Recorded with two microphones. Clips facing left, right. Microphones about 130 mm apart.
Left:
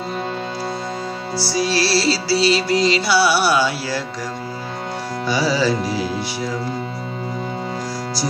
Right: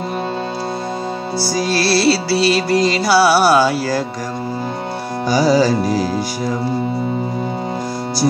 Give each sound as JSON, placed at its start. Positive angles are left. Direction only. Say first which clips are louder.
{"t": 1.4, "sound": "music", "louder": "right 1 dB", "side_deg": -50}
{"t": 5.3, "sound": "music", "louder": "right 5 dB", "side_deg": -40}